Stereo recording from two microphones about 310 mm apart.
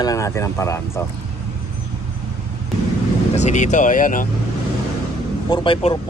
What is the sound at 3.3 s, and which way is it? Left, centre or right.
Speech, left.